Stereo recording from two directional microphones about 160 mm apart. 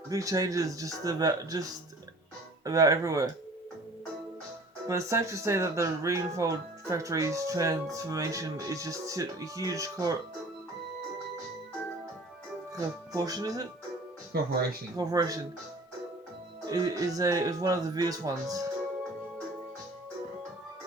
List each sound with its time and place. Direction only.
0.1 s speech: 20° right (ahead or behind)
2.6 s speech: 20° right (ahead or behind)
4.9 s speech: 20° right (ahead or behind)
12.7 s speech: 20° right (ahead or behind)
14.3 s speech: 75° right (ahead or behind)
14.9 s speech: 25° right (ahead or behind)
16.6 s speech: 25° right (ahead or behind)